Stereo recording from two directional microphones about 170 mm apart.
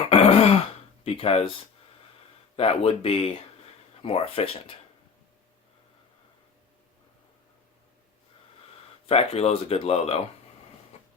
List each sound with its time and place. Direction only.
0.1 s throat clearing: 35° left (ahead or behind)
1.0 s speech: 35° left (ahead or behind)
2.6 s speech: 35° left (ahead or behind)
9.0 s speech: 35° left (ahead or behind)
10.9 s a sound: 40° left (ahead or behind)